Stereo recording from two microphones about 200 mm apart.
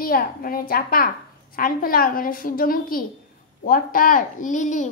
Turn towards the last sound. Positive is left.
turn(degrees=40)  # may be behind; listen again after turning